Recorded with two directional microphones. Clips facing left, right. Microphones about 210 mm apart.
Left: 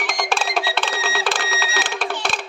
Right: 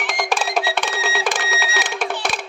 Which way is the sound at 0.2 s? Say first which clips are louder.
Right 2 dB; 10° right (ahead or behind).